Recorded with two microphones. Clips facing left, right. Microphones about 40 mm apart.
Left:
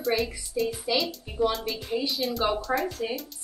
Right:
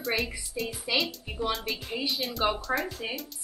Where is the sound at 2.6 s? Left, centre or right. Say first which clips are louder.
Left 2 dB; centre.